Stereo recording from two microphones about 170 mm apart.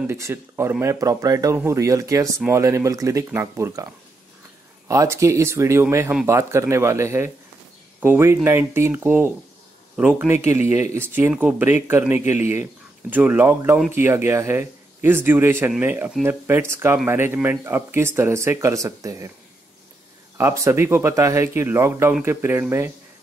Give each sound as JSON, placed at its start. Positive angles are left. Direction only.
{"t": 0.0, "sound": "speech", "side_deg": -15}
{"t": 20.3, "sound": "speech", "side_deg": -15}